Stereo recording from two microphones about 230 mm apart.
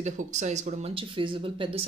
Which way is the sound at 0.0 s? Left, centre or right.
Right.